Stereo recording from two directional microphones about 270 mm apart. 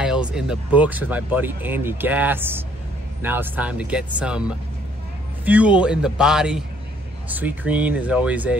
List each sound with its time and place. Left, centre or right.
0.0 s speech: centre